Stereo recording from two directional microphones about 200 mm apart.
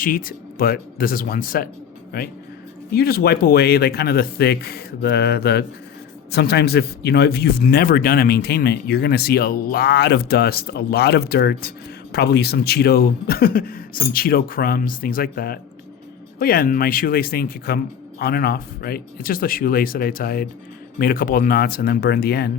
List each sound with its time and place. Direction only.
0.0 s speech: 45° left (ahead or behind)